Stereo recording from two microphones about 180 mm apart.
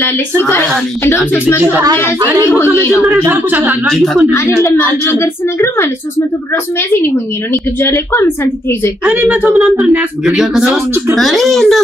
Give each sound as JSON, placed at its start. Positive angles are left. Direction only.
{"t": 0.4, "sound": "a woman's voice", "side_deg": 10}
{"t": 1.6, "sound": "a man's voice", "side_deg": -10}
{"t": 3.3, "sound": "a man's voice", "side_deg": -10}
{"t": 3.8, "sound": "a woman's voice", "side_deg": 0}
{"t": 4.6, "sound": "a woman's voice", "side_deg": 15}
{"t": 9.0, "sound": "a woman's voice", "side_deg": -10}